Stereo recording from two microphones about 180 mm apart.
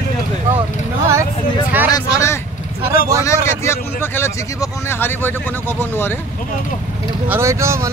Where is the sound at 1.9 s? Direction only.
20° left (ahead or behind).